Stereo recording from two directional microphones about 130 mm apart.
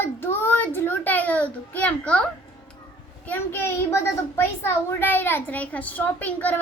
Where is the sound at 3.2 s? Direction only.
15° left (ahead or behind).